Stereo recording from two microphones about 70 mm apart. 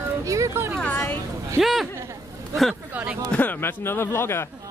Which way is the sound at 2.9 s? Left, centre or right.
Right.